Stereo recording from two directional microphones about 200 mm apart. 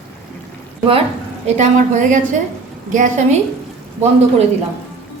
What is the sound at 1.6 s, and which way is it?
A woman's voice, 35° right (ahead or behind).